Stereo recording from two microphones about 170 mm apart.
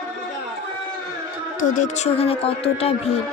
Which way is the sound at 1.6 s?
45° left (ahead or behind).